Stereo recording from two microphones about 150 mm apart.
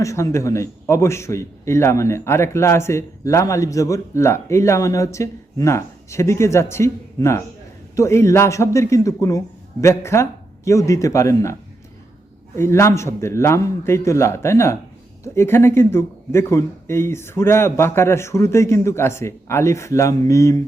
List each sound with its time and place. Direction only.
0.0 s a man's voice: 20° left (ahead or behind)
12.5 s a man's voice: 15° left (ahead or behind)